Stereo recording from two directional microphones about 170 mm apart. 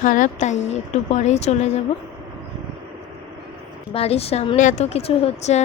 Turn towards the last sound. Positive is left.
turn(degrees=40)  # may be behind; listen again after turning